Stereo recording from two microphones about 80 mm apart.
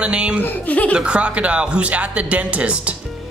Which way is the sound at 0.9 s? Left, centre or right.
Centre.